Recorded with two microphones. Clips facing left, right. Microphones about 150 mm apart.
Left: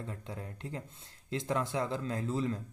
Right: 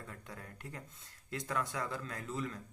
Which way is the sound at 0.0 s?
25° left (ahead or behind).